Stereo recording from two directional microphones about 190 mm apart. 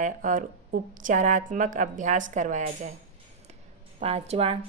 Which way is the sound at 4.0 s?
30° right (ahead or behind).